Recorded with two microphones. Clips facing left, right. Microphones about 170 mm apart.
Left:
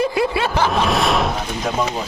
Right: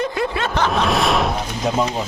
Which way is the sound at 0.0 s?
10° left (ahead or behind).